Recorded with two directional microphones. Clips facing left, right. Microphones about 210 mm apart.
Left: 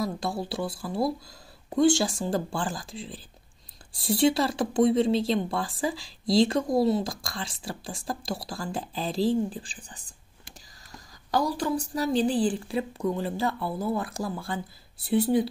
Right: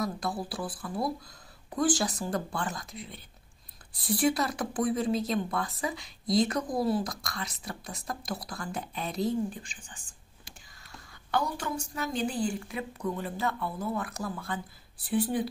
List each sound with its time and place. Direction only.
0.0 s a woman's voice: 25° left (ahead or behind)